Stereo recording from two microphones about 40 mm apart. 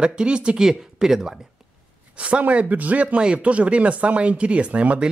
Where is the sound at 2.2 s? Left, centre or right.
Right.